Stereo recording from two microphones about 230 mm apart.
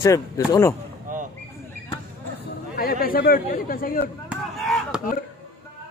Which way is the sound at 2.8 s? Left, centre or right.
Left.